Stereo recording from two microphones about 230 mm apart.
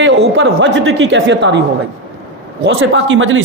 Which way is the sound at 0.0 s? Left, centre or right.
Right.